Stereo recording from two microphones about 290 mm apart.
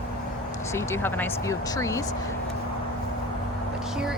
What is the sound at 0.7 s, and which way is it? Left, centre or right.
Speech, centre.